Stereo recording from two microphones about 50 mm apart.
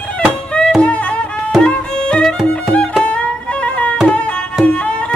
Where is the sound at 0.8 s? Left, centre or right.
Left.